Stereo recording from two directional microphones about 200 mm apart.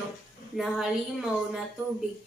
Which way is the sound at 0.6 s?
Centre (ahead or behind).